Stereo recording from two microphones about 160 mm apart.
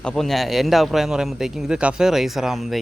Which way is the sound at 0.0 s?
5° left (ahead or behind).